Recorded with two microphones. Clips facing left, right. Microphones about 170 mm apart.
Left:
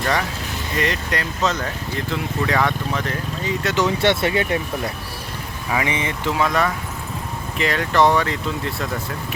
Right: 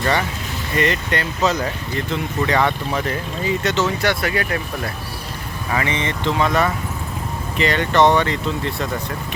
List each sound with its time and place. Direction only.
0.0 s speech: centre (ahead or behind)
3.8 s speech: 20° left (ahead or behind)
5.7 s speech: 10° left (ahead or behind)